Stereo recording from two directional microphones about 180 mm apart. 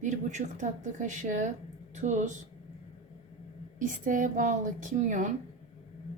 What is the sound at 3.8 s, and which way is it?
Speech, 45° right (ahead or behind).